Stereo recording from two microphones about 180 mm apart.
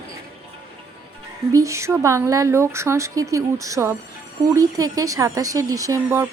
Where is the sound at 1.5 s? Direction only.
15° right (ahead or behind).